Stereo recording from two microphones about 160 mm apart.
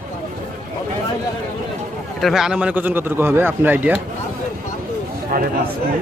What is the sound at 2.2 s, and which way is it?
Speech, 5° right (ahead or behind).